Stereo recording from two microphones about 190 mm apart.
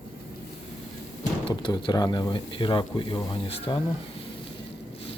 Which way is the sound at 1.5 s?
25° left (ahead or behind).